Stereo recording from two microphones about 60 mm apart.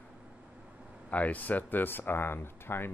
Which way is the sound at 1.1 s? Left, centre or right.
Left.